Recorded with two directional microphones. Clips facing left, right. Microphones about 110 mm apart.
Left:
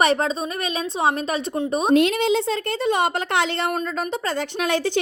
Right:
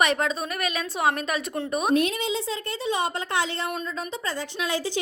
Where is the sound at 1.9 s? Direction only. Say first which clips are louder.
Left 7 dB; 80° left.